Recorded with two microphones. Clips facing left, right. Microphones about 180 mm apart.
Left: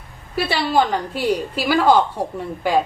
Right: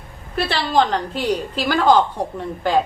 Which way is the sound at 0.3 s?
10° left (ahead or behind).